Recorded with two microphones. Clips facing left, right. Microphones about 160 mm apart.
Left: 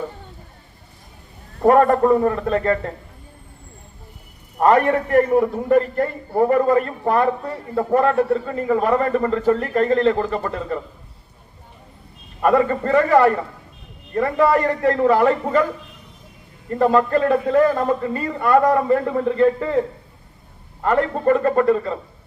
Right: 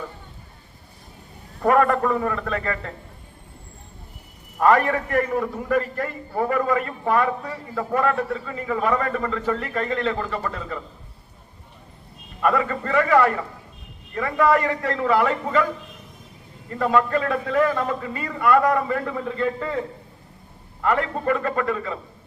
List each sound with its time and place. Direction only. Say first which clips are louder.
1.6 s a man's voice: left 5 dB; 35° left (ahead or behind)
4.9 s a man's voice: left 6 dB; 35° left (ahead or behind)
12.4 s a man's voice: left 5 dB; 35° left (ahead or behind)
16.7 s a man's voice: left 4 dB; 35° left (ahead or behind)
19.1 s a man's voice: left 8 dB; 45° left (ahead or behind)
20.8 s a man's voice: left 5 dB; 35° left (ahead or behind)